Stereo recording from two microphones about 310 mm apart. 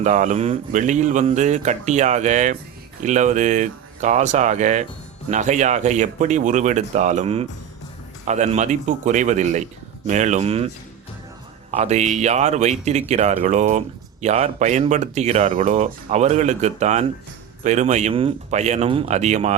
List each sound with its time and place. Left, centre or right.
0.0 s speech: right
11.7 s speech: right